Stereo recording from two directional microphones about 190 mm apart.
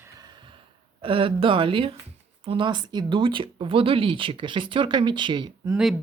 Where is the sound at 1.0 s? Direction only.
30° right (ahead or behind).